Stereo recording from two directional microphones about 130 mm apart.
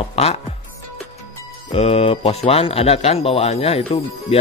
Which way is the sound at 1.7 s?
50° left (ahead or behind).